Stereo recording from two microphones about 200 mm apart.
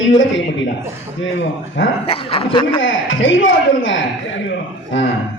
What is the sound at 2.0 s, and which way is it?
Speech, 30° left (ahead or behind).